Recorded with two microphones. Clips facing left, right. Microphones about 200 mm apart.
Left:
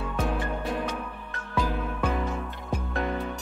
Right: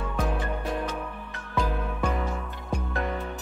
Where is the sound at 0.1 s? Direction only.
Centre (ahead or behind).